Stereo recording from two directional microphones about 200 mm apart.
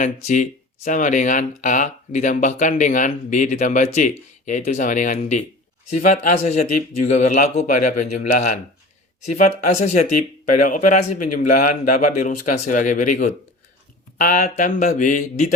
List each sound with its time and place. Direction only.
0.0 s speech: 40° left (ahead or behind)